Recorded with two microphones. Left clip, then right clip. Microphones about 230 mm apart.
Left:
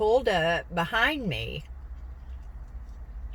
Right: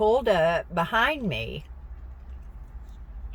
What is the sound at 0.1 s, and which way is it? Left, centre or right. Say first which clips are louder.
A woman's voice: right 2 dB; centre.